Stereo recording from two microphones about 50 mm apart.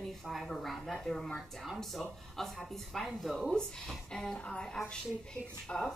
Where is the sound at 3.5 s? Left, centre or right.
Centre.